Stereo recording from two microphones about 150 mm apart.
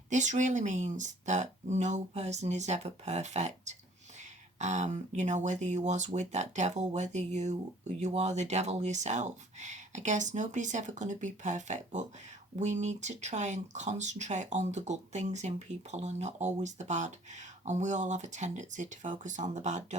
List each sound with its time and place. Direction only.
0.1 s speech: 55° right (ahead or behind)